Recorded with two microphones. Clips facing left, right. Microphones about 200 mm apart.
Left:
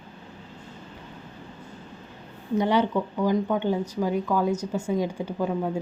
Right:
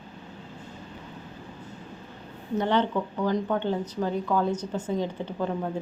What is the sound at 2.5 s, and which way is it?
A woman's voice, 10° left (ahead or behind).